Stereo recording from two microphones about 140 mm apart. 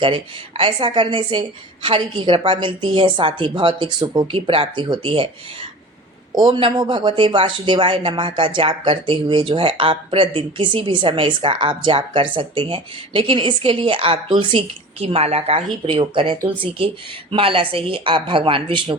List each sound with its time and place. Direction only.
0.0 s speech: 35° right (ahead or behind)
6.3 s speech: 35° right (ahead or behind)